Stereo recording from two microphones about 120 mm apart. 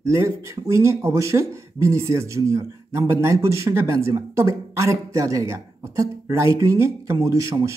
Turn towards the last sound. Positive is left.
turn(degrees=-25)  # may be behind; listen again after turning